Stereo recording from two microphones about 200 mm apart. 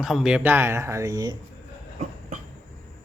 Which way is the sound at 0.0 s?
Centre (ahead or behind).